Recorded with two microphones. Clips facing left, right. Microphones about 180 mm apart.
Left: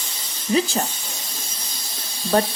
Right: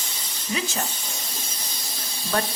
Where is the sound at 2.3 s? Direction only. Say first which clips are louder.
Left 7 dB; 30° left (ahead or behind).